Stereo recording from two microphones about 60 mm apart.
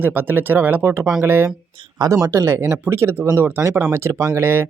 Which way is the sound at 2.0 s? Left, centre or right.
Right.